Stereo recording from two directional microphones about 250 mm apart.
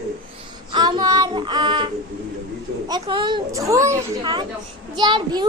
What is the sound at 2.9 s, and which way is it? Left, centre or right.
A child's voice, centre.